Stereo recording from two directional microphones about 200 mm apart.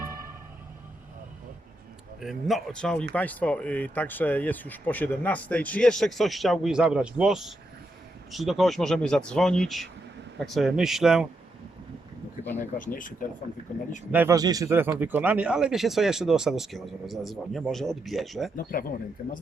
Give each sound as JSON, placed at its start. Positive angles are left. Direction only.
{"t": 0.0, "sound": "music", "side_deg": -10}
{"t": 2.2, "sound": "a man's voice", "side_deg": 0}
{"t": 12.7, "sound": "speech", "side_deg": 40}
{"t": 14.1, "sound": "a man's voice", "side_deg": -10}
{"t": 18.5, "sound": "speech", "side_deg": 45}